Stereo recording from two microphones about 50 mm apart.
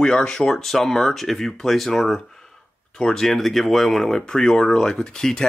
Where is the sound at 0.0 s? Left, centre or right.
Centre.